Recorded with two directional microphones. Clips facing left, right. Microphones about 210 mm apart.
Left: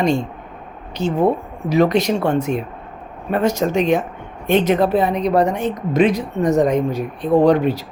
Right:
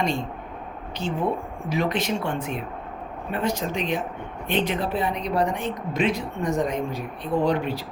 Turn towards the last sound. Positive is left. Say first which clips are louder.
# left 9 dB
turn(degrees=40)  # may be behind; listen again after turning